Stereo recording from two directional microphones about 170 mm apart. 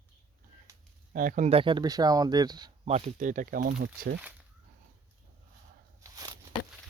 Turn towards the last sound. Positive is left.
turn(degrees=-20)  # may be behind; listen again after turning